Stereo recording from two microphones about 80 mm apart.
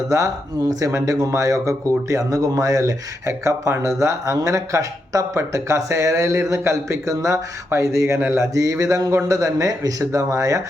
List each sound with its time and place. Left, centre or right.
0.1 s speech: right